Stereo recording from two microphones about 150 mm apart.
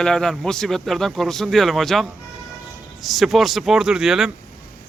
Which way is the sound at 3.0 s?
Centre (ahead or behind).